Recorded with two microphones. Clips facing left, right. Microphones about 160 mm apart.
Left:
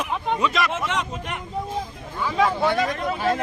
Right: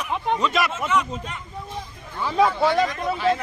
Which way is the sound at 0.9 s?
75° left (ahead or behind).